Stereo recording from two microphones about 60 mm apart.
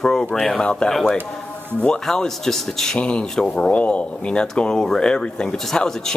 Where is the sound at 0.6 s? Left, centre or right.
Centre.